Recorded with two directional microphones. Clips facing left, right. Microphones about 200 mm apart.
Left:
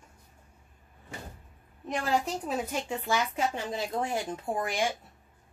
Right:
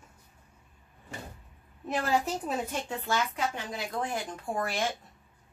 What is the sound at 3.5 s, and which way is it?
Speech, 25° left (ahead or behind).